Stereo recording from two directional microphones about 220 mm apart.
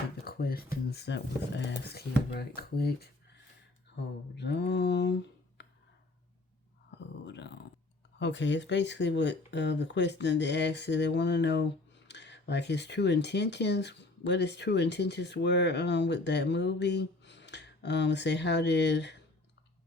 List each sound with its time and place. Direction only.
0.3 s speech: 45° left (ahead or behind)
4.4 s speech: 50° left (ahead or behind)
5.6 s a sound: 50° left (ahead or behind)
7.3 s speech: 50° left (ahead or behind)